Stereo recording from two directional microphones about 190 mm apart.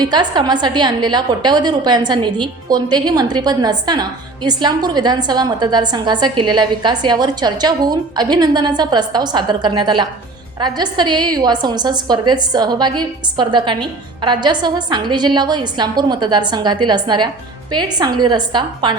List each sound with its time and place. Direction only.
0.0 s a woman's voice: 20° right (ahead or behind)